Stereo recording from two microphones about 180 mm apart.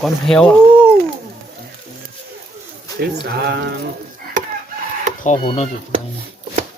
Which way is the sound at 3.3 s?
60° right (ahead or behind).